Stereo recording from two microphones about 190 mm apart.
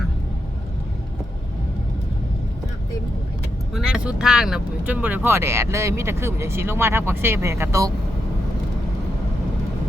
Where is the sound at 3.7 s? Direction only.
5° right (ahead or behind).